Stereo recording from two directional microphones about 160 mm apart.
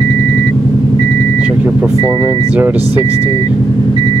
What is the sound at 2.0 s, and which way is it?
Vehicle, 25° right (ahead or behind).